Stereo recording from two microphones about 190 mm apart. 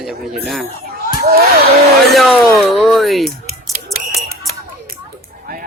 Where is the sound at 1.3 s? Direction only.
55° right (ahead or behind).